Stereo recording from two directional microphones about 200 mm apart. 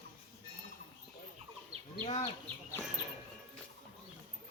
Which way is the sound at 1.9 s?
30° left (ahead or behind).